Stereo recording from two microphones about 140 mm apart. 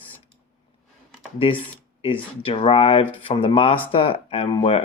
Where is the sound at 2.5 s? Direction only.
40° left (ahead or behind).